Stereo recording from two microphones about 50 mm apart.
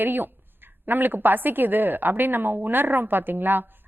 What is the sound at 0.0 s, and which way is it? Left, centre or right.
A woman's voice, right.